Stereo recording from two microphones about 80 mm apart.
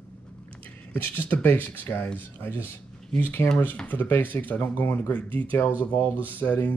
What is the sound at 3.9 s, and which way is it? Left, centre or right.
Speech, left.